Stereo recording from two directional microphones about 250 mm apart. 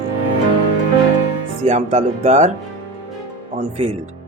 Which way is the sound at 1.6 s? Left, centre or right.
Right.